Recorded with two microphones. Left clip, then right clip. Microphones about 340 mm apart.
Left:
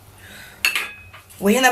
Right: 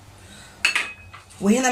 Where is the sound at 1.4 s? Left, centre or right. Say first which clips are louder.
Left 5 dB; left.